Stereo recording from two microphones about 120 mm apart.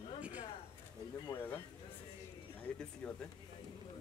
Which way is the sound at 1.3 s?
20° left (ahead or behind).